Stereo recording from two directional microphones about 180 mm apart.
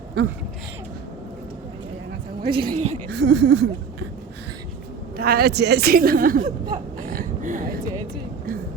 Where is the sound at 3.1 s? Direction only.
75° right (ahead or behind).